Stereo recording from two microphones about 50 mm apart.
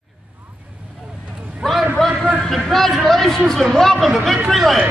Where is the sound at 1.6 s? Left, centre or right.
Centre.